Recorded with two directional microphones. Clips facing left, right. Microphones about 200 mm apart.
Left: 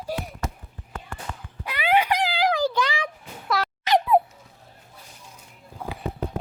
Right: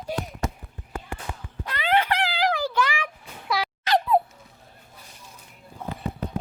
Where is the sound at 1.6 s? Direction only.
10° left (ahead or behind).